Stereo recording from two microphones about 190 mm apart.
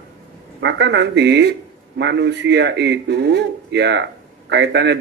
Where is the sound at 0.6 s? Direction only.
65° right (ahead or behind).